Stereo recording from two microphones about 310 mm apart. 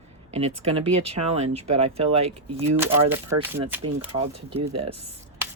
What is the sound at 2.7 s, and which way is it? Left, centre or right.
Speech, centre.